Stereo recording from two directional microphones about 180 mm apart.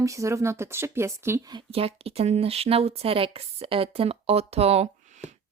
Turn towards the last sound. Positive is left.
turn(degrees=-35)  # may be behind; listen again after turning